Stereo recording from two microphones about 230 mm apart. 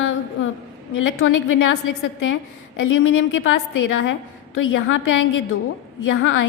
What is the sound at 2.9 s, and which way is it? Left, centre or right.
A woman's voice, left.